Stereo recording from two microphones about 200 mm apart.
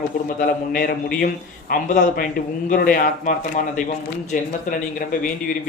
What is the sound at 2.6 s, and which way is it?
Speech, 45° left (ahead or behind).